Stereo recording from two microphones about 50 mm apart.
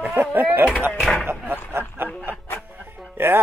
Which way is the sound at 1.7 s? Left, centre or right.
Right.